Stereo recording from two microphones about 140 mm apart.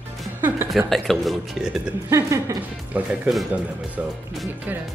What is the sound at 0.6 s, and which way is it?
Speech, centre (ahead or behind).